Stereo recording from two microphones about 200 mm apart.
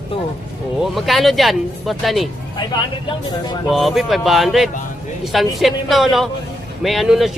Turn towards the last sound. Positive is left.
turn(degrees=0)  # may be behind; listen again after turning